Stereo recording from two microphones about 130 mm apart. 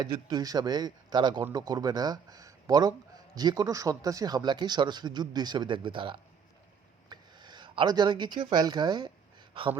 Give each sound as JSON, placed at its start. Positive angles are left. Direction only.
{"t": 0.0, "sound": "speech", "side_deg": -30}